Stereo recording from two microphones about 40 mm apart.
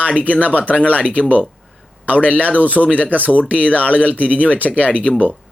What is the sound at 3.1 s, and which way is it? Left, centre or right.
Speech, right.